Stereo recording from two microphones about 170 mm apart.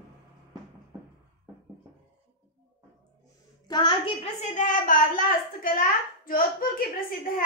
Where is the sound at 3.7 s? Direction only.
30° left (ahead or behind).